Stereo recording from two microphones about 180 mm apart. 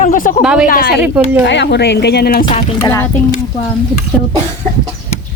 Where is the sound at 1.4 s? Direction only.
75° left (ahead or behind).